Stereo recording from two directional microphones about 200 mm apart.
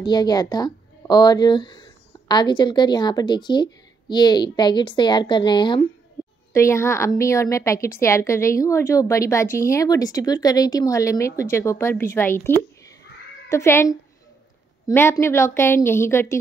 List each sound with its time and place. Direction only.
0.0 s a woman's voice: 20° left (ahead or behind)